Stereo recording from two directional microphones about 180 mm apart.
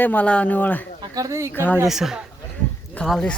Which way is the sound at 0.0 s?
10° left (ahead or behind).